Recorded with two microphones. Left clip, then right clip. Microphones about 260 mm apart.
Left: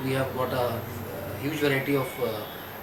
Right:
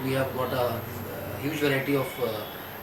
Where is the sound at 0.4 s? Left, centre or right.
Centre.